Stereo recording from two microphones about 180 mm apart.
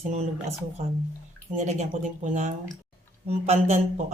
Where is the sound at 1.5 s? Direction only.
40° right (ahead or behind).